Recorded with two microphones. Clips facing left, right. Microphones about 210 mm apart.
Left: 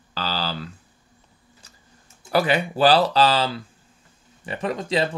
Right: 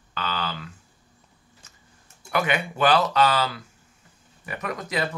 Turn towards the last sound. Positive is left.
turn(degrees=30)  # may be behind; listen again after turning